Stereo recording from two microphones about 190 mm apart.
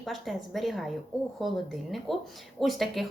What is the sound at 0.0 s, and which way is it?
A woman's voice, centre (ahead or behind).